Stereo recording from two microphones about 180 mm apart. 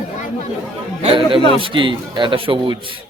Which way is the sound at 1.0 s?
30° right (ahead or behind).